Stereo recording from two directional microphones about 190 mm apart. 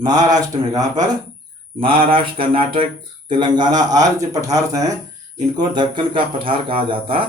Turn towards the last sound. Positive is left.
turn(degrees=-30)  # may be behind; listen again after turning